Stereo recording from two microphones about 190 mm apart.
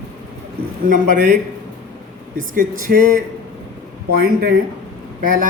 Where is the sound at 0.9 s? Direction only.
40° right (ahead or behind).